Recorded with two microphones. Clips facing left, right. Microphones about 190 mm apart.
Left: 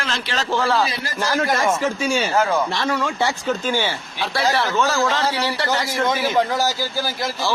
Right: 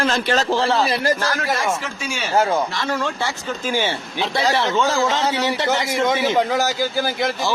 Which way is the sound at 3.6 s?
20° right (ahead or behind).